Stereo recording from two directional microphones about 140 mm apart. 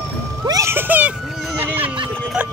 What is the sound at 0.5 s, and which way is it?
Cat, 20° right (ahead or behind).